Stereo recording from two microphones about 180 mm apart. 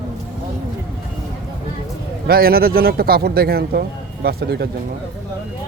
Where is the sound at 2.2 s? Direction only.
55° right (ahead or behind).